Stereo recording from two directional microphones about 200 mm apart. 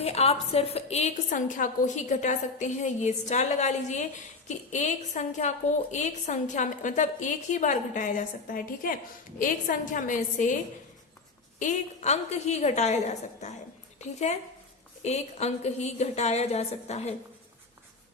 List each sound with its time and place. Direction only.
0.0 s a woman's voice: 30° left (ahead or behind)
11.6 s a woman's voice: 35° left (ahead or behind)